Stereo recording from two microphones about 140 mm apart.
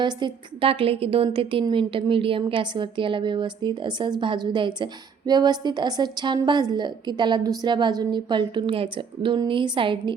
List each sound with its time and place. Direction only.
0.0 s a woman's voice: 30° right (ahead or behind)